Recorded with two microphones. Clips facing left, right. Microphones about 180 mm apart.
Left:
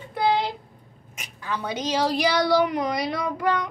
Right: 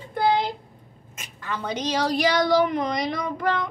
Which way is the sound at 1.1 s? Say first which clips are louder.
Left 1 dB; 10° left (ahead or behind).